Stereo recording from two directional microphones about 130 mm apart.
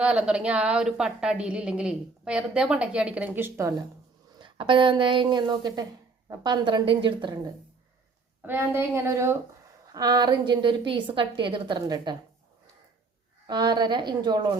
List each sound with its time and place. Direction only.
0.0 s a woman's voice: 10° right (ahead or behind)
4.4 s a woman's voice: 40° right (ahead or behind)
8.4 s a woman's voice: 15° right (ahead or behind)
9.9 s a woman's voice: 30° right (ahead or behind)
13.5 s a woman's voice: 35° right (ahead or behind)